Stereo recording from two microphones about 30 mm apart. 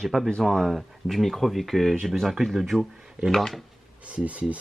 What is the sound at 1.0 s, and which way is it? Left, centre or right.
Speech, centre.